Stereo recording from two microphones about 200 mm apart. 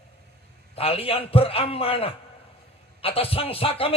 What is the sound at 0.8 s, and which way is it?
Speech, 30° left (ahead or behind).